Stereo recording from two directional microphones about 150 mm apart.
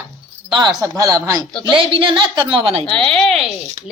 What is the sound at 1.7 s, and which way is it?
A woman's voice, 35° right (ahead or behind).